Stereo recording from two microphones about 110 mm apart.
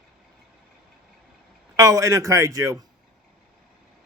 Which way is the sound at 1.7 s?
30° right (ahead or behind).